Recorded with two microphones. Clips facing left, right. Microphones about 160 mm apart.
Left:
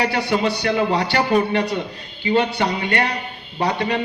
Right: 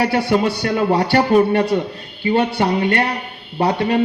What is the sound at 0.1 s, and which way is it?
A man's voice, 50° right (ahead or behind).